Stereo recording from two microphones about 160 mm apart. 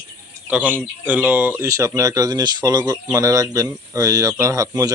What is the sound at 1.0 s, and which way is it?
A man's voice, 10° right (ahead or behind).